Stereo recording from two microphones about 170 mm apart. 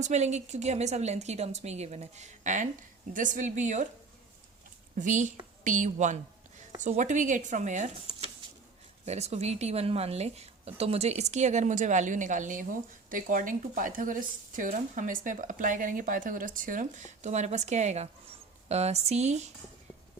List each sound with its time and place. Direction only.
0.0 s a woman's voice: 40° right (ahead or behind)
4.9 s a woman's voice: 45° right (ahead or behind)
9.0 s a woman's voice: 40° right (ahead or behind)